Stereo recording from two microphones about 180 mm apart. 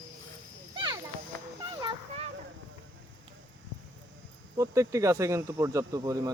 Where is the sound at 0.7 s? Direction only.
25° right (ahead or behind).